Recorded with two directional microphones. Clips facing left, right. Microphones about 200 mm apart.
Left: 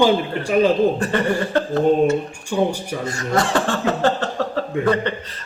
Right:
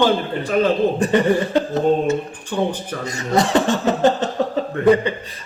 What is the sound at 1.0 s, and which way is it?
Speech, 15° right (ahead or behind).